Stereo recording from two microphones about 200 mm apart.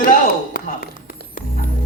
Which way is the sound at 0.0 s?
45° left (ahead or behind).